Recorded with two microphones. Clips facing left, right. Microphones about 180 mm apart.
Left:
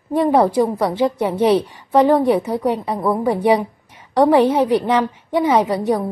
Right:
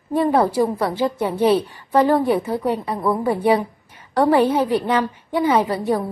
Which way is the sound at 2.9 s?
25° left (ahead or behind).